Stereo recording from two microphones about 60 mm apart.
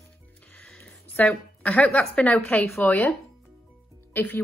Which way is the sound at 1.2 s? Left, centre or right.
Left.